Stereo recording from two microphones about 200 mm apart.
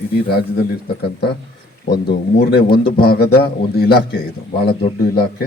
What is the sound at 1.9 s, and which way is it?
A man's voice, 50° left (ahead or behind).